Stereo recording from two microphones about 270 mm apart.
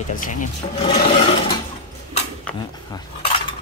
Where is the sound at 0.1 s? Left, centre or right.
Left.